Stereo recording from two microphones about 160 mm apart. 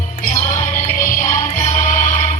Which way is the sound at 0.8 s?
55° left (ahead or behind).